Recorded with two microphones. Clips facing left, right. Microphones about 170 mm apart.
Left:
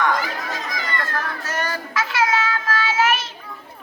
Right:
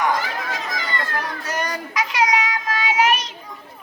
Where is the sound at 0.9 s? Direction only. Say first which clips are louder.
Left 1 dB; 15° right (ahead or behind).